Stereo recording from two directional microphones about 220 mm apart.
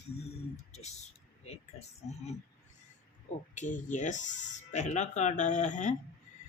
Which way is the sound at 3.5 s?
35° left (ahead or behind).